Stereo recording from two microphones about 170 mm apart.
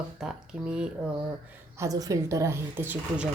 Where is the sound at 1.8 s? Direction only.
20° right (ahead or behind).